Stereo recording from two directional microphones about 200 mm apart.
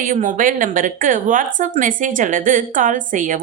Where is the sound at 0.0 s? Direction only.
40° right (ahead or behind).